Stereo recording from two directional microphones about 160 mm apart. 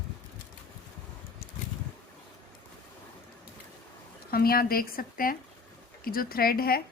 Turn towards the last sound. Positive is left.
turn(degrees=70)  # may be behind; listen again after turning